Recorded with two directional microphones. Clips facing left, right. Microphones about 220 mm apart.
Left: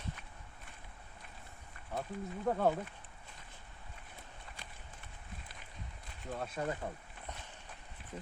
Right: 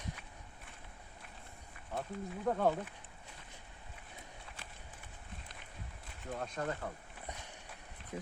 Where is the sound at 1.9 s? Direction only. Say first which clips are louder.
Even; centre (ahead or behind).